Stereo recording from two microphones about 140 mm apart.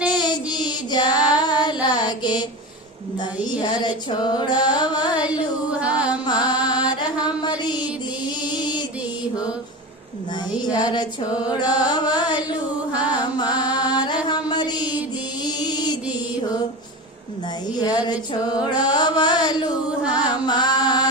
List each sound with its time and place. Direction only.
0.1 s child singing: 30° left (ahead or behind)
3.6 s carnatic music: 30° left (ahead or behind)
6.6 s music: 10° right (ahead or behind)
6.8 s mantra: 30° left (ahead or behind)
10.7 s carnatic music: 30° left (ahead or behind)
13.7 s music: 30° left (ahead or behind)
14.3 s mantra: 30° left (ahead or behind)
15.4 s music: 30° left (ahead or behind)
17.7 s mantra: 30° left (ahead or behind)